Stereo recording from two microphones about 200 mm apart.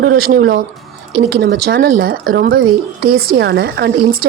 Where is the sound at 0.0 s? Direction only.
50° right (ahead or behind).